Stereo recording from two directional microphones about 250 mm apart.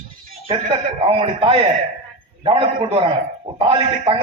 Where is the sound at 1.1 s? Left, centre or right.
Right.